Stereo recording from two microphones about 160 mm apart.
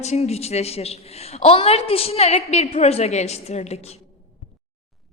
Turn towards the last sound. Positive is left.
turn(degrees=45)  # may be behind; listen again after turning